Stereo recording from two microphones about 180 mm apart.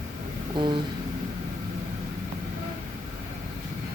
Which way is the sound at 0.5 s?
25° right (ahead or behind).